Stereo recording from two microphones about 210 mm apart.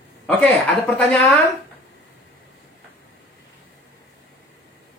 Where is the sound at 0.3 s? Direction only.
5° left (ahead or behind).